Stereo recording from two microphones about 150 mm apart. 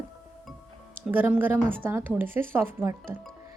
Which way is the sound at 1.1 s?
10° right (ahead or behind).